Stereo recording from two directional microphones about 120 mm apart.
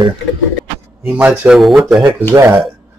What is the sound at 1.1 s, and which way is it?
Speech, 15° right (ahead or behind).